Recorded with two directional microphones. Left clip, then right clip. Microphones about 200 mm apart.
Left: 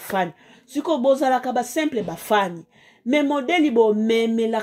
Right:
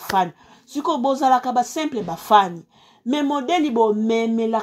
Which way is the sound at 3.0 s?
35° right (ahead or behind).